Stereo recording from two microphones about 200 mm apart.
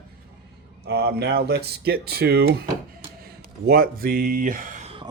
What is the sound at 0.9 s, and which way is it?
Speech, 55° right (ahead or behind).